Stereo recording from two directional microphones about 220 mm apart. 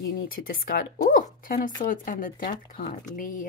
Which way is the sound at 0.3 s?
40° left (ahead or behind).